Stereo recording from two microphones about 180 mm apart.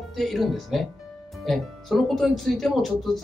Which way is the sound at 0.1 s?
Centre (ahead or behind).